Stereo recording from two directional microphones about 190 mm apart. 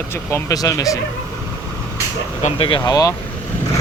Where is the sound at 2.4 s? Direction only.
30° left (ahead or behind).